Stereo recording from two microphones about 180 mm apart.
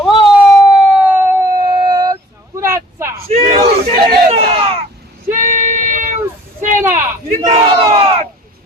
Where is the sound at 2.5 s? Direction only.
15° right (ahead or behind).